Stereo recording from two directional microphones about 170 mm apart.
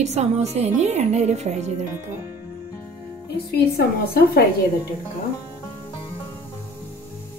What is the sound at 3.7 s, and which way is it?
Speech, 65° left (ahead or behind).